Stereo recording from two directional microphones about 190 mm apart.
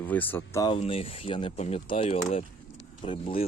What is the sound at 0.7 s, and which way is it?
Speech, 30° left (ahead or behind).